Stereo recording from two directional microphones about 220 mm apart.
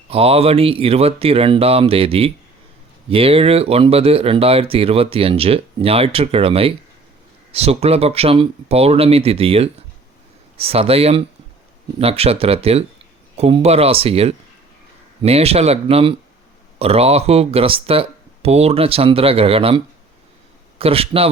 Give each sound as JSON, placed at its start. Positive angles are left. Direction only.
{"t": 0.1, "sound": "speech", "side_deg": -25}